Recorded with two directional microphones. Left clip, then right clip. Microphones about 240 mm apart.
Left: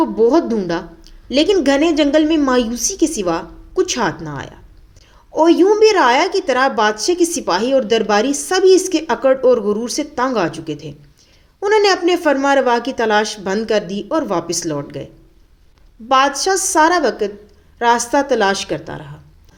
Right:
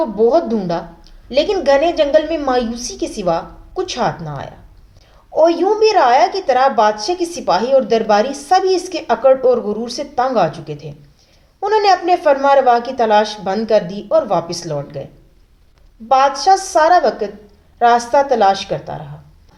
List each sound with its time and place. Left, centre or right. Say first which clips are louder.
0.0 s a woman's voice: even; left
16.0 s a woman's voice: right 3 dB; left